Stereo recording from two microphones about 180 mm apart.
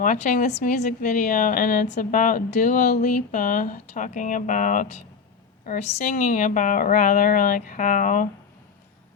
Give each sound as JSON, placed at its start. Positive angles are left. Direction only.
{"t": 0.0, "sound": "speech", "side_deg": 45}